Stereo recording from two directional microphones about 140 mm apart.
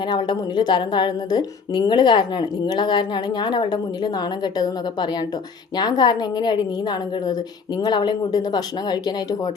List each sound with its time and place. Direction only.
0.1 s a woman's voice: 30° left (ahead or behind)